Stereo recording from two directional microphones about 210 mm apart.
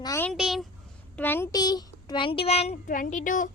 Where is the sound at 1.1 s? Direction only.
10° left (ahead or behind); by 3.5 s 40° left (ahead or behind).